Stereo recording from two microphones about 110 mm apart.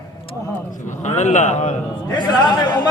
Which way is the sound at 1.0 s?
90° left.